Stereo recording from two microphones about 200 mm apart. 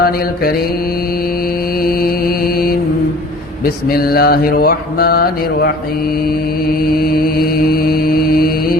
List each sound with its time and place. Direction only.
1.8 s mantra: 45° left (ahead or behind)
3.8 s mantra: 50° left (ahead or behind)